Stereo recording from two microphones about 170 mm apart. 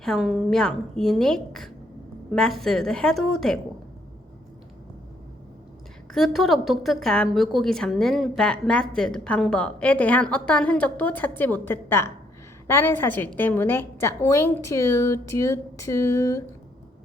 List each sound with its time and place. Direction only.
0.0 s a woman's voice: centre (ahead or behind)
6.1 s a woman's voice: centre (ahead or behind); by 16.4 s 20° left (ahead or behind)